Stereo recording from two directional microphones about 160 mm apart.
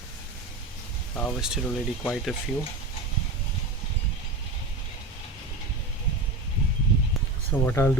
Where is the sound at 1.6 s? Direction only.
5° left (ahead or behind).